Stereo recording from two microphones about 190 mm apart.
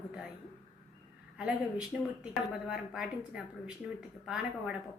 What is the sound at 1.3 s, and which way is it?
Speech, 5° right (ahead or behind).